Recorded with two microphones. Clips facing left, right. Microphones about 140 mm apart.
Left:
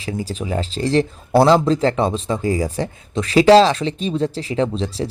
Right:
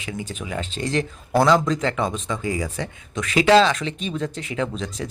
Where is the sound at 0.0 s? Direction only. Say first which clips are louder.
Left 6 dB; 35° left (ahead or behind).